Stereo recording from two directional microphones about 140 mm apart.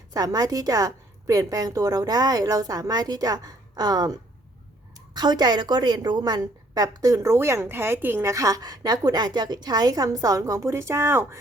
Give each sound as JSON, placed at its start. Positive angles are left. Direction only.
{"t": 0.1, "sound": "a woman's voice", "side_deg": -25}